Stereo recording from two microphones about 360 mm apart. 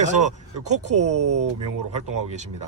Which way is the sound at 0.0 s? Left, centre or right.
Centre.